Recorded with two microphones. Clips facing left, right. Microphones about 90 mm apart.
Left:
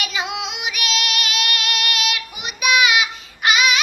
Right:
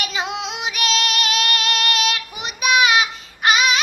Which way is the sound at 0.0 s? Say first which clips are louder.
Even; 35° right (ahead or behind).